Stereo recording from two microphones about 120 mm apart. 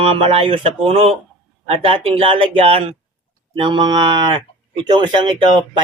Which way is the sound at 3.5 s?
40° right (ahead or behind).